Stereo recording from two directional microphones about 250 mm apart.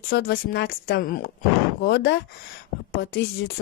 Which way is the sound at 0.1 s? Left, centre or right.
Left.